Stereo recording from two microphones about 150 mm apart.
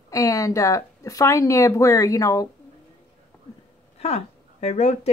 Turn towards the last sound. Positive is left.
turn(degrees=45)  # may be behind; listen again after turning